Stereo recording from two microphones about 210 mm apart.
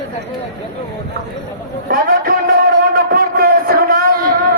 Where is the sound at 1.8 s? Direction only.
45° right (ahead or behind).